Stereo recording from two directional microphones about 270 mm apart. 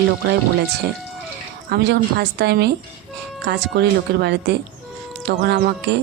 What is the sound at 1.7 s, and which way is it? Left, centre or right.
Music, right.